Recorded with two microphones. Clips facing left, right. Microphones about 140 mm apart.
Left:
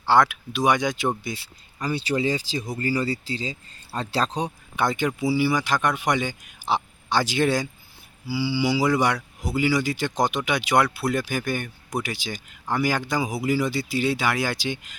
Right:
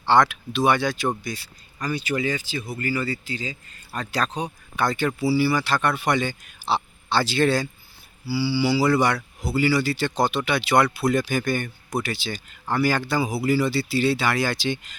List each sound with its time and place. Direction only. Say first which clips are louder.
0.0 s speech: right 1 dB; 10° left (ahead or behind); by 4.5 s 30° left (ahead or behind)
4.8 s speech: even; 15° left (ahead or behind)